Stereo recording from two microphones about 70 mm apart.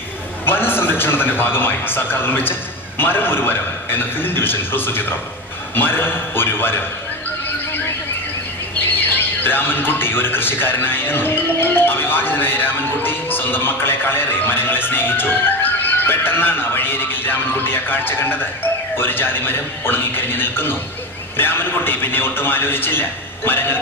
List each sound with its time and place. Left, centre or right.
0.5 s a man's voice: left
8.9 s a man's voice: left